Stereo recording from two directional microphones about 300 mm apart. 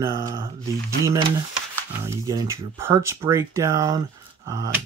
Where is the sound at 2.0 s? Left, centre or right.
Centre.